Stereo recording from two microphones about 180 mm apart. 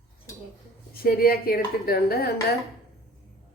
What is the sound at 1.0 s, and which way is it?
Speech, 55° left (ahead or behind).